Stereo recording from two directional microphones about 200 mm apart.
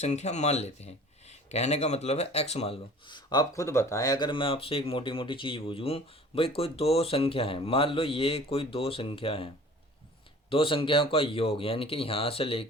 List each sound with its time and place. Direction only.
0.0 s speech: 35° left (ahead or behind)
10.5 s speech: 25° left (ahead or behind)